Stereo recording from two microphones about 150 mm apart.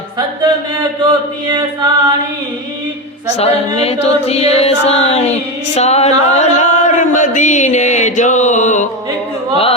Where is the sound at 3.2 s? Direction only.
45° left (ahead or behind).